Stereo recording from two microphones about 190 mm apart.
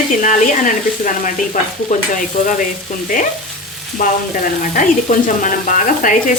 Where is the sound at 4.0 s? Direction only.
40° left (ahead or behind).